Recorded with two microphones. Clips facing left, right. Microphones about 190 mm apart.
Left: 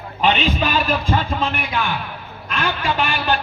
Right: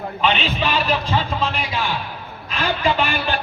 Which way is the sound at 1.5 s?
60° left (ahead or behind).